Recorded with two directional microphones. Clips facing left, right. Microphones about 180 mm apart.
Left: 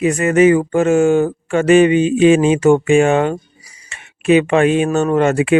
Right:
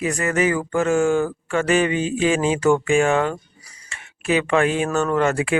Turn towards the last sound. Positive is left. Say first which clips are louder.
# left 6 dB
turn(degrees=20)  # may be behind; listen again after turning